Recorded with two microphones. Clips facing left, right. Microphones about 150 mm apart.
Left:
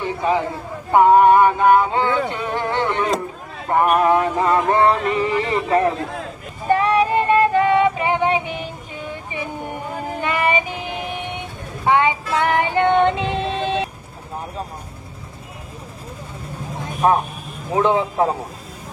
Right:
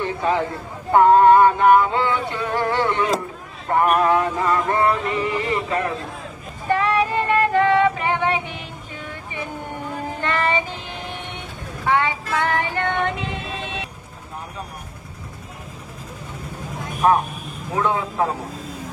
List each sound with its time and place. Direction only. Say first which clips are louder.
0.2 s a man's voice: left 2 dB; 15° left (ahead or behind)
0.9 s a sound: even; 15° left (ahead or behind)
3.7 s male singing: left 2 dB; 20° left (ahead or behind)
5.4 s speech: left 5 dB; 30° left (ahead or behind)
6.7 s female singing: left 3 dB; 20° left (ahead or behind)
10.2 s child singing: left 2 dB; 15° left (ahead or behind); by 13.8 s 30° left (ahead or behind)
17.0 s male singing: even; 30° left (ahead or behind)